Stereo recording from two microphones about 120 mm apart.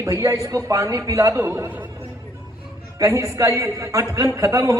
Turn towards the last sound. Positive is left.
turn(degrees=-30)  # may be behind; listen again after turning